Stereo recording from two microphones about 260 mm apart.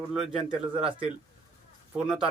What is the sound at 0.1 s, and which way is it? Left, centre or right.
Speech, centre.